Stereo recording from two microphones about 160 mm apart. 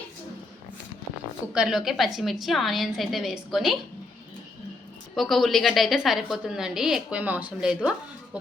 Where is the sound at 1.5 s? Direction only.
5° right (ahead or behind).